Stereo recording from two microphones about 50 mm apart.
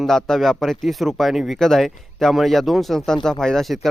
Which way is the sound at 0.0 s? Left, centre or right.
Centre.